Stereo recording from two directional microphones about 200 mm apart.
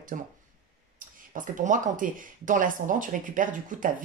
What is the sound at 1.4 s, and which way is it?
Speech, 40° right (ahead or behind).